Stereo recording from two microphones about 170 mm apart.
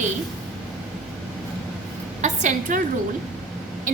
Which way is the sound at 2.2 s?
45° right (ahead or behind).